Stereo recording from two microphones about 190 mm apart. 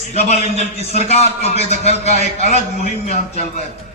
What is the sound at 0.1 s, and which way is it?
A man's voice, 35° left (ahead or behind).